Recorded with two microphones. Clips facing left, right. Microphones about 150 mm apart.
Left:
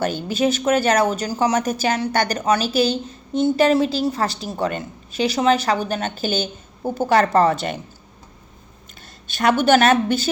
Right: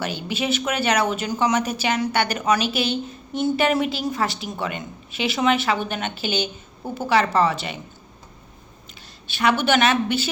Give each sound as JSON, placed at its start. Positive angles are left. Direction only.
{"t": 0.0, "sound": "speech", "side_deg": 45}
{"t": 9.0, "sound": "speech", "side_deg": 45}